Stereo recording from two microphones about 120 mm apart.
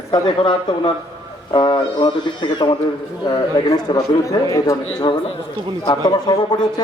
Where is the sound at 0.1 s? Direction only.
45° left (ahead or behind).